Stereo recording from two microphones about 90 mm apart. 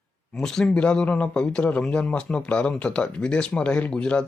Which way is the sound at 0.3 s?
5° left (ahead or behind).